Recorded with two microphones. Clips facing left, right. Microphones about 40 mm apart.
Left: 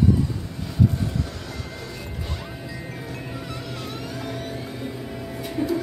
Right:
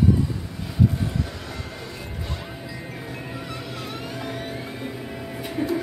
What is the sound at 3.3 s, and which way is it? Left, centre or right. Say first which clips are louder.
Music: even; centre.